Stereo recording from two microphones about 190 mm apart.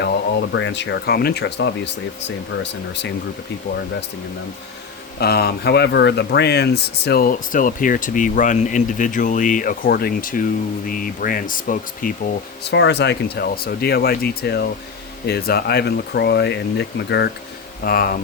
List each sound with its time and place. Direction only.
0.5 s speech: 70° left (ahead or behind)
5.2 s speech: 55° left (ahead or behind)
12.7 s speech: 65° left (ahead or behind)